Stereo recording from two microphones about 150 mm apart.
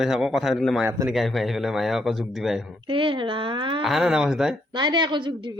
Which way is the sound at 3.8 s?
Centre (ahead or behind).